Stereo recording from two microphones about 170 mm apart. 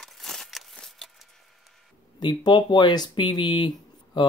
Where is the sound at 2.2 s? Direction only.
25° left (ahead or behind).